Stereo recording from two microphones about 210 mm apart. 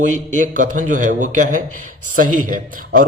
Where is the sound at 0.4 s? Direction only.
40° right (ahead or behind).